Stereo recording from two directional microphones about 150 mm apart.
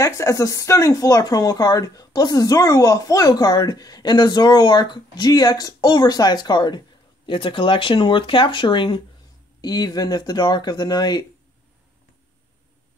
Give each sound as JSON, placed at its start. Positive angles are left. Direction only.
{"t": 0.0, "sound": "speech", "side_deg": 20}